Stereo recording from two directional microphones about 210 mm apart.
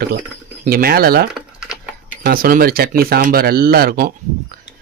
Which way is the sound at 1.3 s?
5° right (ahead or behind).